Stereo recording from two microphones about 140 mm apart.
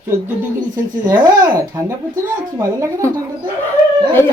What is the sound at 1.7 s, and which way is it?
A woman's voice, 25° right (ahead or behind).